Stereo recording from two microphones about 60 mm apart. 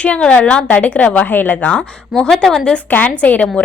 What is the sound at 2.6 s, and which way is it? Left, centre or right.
Speech, left.